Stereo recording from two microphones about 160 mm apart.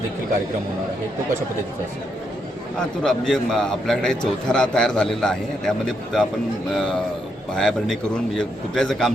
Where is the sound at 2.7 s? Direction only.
5° left (ahead or behind).